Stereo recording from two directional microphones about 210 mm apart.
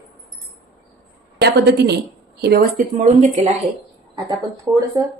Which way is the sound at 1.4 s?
50° right (ahead or behind).